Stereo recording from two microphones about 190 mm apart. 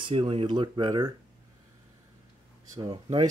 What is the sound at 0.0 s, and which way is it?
Speech, 30° right (ahead or behind).